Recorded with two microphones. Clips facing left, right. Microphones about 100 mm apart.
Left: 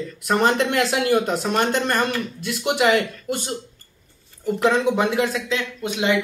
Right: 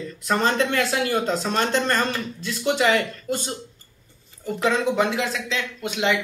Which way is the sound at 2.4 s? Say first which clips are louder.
Left 1 dB; 15° left (ahead or behind).